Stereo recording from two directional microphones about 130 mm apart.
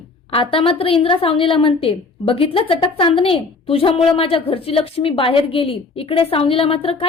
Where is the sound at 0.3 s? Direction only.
45° left (ahead or behind).